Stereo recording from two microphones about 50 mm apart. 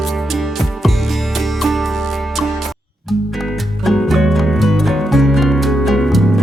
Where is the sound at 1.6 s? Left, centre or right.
Centre.